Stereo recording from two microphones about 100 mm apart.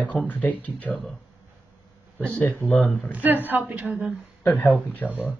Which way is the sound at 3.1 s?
20° right (ahead or behind).